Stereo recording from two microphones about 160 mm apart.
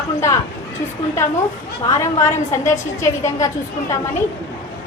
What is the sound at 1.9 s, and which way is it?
A woman's voice, 20° left (ahead or behind).